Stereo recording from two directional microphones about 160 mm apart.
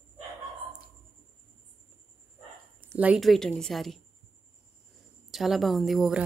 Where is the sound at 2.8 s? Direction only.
10° right (ahead or behind).